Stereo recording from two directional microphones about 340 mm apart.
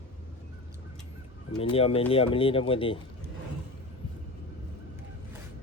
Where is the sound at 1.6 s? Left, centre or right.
Centre.